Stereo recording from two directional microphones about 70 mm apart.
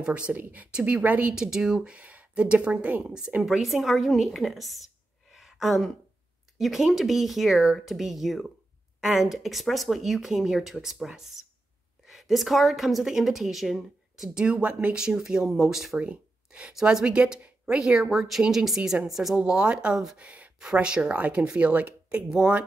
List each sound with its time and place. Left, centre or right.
0.0 s speech: centre
1.3 s speech: centre
3.4 s speech: centre
5.3 s a sound: centre
6.6 s a woman's voice: centre
14.4 s speech: centre
16.0 s speech: centre
20.2 s speech: centre